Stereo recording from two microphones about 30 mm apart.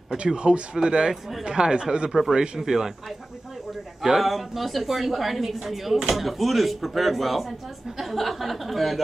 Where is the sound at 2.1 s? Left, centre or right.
Centre.